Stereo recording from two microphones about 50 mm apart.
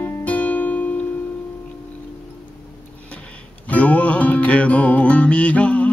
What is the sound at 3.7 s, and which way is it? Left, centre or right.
Music, left.